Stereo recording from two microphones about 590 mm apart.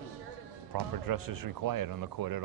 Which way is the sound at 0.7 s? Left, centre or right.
Right.